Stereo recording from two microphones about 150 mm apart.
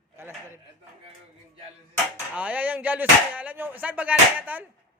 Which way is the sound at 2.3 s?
10° right (ahead or behind).